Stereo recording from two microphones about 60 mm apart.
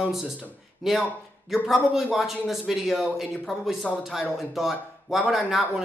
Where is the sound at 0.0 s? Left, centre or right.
Centre.